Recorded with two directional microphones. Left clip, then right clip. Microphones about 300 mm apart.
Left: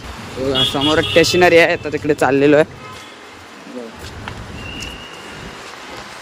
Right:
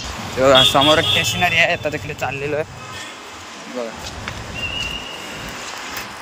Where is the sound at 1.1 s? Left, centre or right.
Centre.